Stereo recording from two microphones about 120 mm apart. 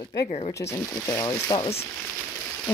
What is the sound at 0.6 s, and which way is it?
Speech, 25° left (ahead or behind).